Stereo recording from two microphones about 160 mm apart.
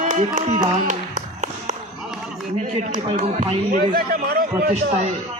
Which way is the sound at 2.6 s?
45° right (ahead or behind).